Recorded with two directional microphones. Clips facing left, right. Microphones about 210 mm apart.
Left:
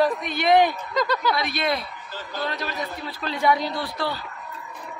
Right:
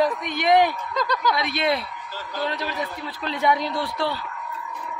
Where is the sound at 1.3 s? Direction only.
25° right (ahead or behind).